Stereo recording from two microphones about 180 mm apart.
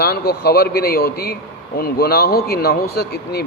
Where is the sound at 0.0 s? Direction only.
60° left (ahead or behind).